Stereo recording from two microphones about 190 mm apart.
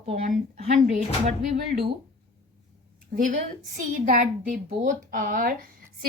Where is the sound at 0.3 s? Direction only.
35° right (ahead or behind).